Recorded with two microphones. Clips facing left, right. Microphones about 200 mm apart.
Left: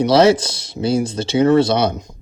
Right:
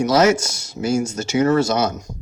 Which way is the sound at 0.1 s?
30° left (ahead or behind).